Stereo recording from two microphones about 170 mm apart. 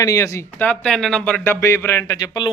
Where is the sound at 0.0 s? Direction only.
20° left (ahead or behind).